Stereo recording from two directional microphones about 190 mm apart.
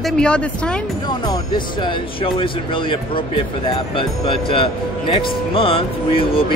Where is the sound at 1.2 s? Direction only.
25° left (ahead or behind).